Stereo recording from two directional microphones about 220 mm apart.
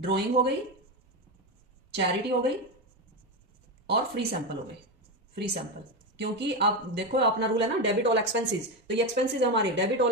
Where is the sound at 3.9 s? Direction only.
50° right (ahead or behind).